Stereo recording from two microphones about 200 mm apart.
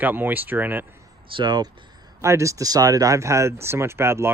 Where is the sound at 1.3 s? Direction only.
20° right (ahead or behind).